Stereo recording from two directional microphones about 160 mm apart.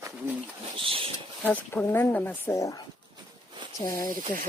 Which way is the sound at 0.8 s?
35° right (ahead or behind).